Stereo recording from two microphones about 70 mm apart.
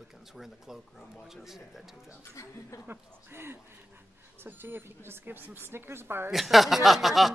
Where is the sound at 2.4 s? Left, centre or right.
Left.